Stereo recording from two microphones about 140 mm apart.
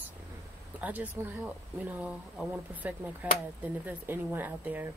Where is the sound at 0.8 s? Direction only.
10° right (ahead or behind).